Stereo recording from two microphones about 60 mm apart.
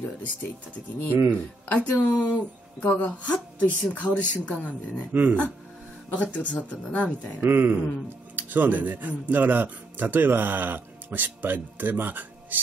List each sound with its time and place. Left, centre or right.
1.1 s speech: right
1.7 s speech: left
5.1 s speech: right
6.3 s speech: left
7.3 s speech: right